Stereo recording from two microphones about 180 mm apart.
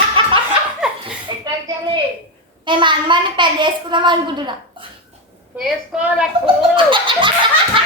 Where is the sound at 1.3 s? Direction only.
20° right (ahead or behind).